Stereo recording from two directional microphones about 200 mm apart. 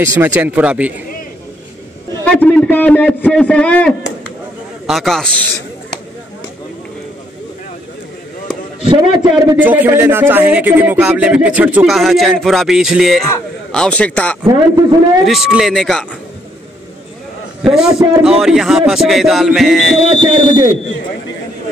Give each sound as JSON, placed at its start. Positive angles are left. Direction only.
{"t": 0.0, "sound": "speech", "side_deg": -10}
{"t": 2.2, "sound": "a man's voice", "side_deg": 5}
{"t": 8.8, "sound": "a man's voice", "side_deg": -20}
{"t": 9.6, "sound": "a man's voice", "side_deg": -10}
{"t": 14.4, "sound": "a man's voice", "side_deg": -20}
{"t": 15.2, "sound": "a man's voice", "side_deg": 0}
{"t": 17.6, "sound": "a man's voice", "side_deg": 0}
{"t": 20.2, "sound": "a man's voice", "side_deg": -25}